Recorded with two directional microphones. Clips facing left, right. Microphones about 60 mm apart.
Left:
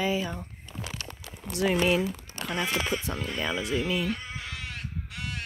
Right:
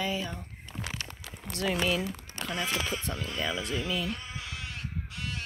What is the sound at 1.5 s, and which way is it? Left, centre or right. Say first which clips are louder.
Speech: left 5 dB; centre.